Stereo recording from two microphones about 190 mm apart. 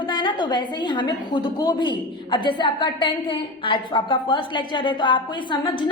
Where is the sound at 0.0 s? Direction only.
25° left (ahead or behind).